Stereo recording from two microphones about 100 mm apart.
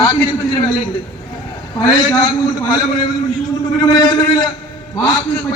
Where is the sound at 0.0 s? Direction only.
40° left (ahead or behind).